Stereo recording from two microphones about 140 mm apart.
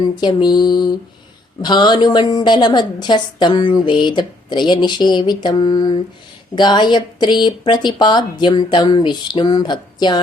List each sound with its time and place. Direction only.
0.2 s a woman's voice: 30° left (ahead or behind)